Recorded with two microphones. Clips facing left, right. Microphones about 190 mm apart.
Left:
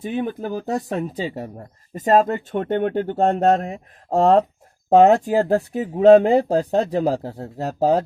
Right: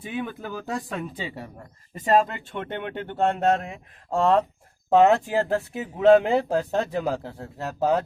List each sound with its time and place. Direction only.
0.0 s speech: 40° left (ahead or behind)